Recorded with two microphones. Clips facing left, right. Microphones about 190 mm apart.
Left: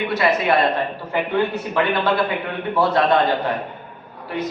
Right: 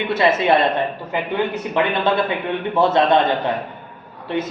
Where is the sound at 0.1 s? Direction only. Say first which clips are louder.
Right 3 dB; 25° right (ahead or behind).